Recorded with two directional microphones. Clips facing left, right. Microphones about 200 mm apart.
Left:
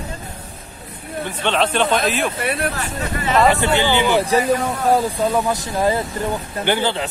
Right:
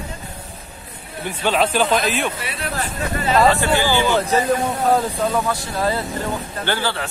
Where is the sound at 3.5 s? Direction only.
20° left (ahead or behind).